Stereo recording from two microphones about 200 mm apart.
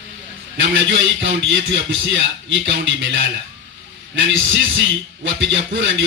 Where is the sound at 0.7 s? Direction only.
70° right (ahead or behind).